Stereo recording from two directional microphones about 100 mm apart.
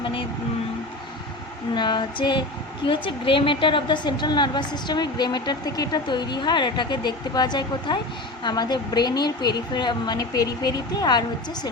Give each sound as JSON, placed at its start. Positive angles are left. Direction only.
{"t": 1.7, "sound": "female singing", "side_deg": 50}
{"t": 2.8, "sound": "a woman's voice", "side_deg": 60}